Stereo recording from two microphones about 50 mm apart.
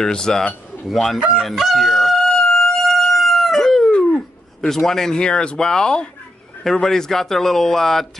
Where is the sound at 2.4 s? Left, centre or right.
Centre.